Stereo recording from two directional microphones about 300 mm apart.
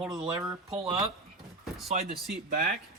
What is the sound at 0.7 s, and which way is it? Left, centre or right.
Speech, centre.